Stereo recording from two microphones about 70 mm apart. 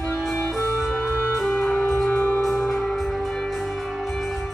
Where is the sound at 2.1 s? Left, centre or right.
Centre.